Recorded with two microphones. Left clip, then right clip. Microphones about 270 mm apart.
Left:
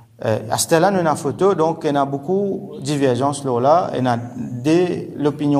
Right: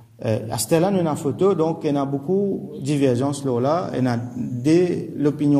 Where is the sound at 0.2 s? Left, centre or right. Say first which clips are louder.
Left 5 dB; centre.